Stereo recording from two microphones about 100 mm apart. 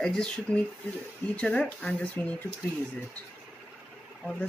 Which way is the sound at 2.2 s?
20° left (ahead or behind).